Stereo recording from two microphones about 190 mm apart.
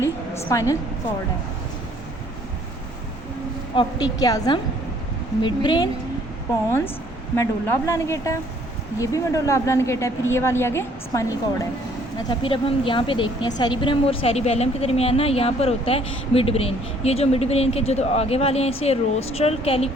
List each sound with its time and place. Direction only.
0.5 s a woman's voice: 15° left (ahead or behind)
3.8 s speech: 20° left (ahead or behind)
6.7 s a woman's voice: 10° left (ahead or behind)
12.3 s a woman's voice: 25° left (ahead or behind)